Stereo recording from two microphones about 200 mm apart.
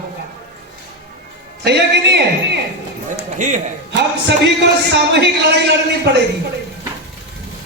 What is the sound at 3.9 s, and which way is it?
A man's voice, 55° right (ahead or behind).